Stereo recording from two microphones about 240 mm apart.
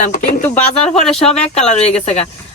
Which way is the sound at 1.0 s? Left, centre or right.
Centre.